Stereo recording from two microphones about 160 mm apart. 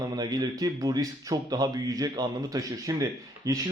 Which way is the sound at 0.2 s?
25° right (ahead or behind).